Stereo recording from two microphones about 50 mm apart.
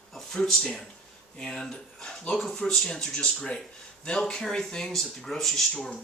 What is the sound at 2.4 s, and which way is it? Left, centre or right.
Speech, centre.